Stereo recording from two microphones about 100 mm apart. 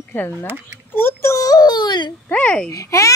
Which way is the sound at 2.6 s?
30° left (ahead or behind).